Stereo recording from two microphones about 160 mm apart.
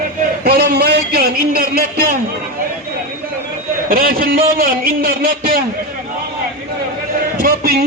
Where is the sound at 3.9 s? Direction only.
65° right (ahead or behind).